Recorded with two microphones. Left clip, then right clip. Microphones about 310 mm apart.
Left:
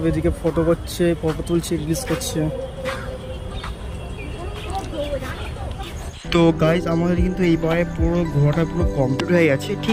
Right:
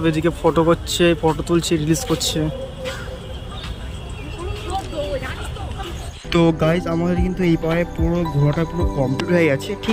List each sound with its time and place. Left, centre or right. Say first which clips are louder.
0.0 s speech: right 3 dB; centre
6.3 s speech: even; centre